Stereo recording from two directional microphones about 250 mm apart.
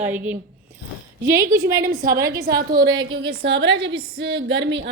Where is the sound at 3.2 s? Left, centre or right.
Right.